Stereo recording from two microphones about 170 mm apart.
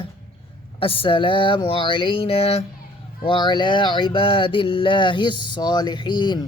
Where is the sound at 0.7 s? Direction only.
30° left (ahead or behind).